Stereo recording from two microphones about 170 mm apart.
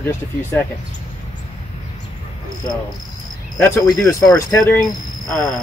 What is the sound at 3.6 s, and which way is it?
Speech, 20° left (ahead or behind).